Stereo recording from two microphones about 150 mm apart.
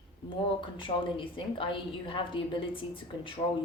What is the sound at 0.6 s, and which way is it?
A woman's voice, 35° left (ahead or behind).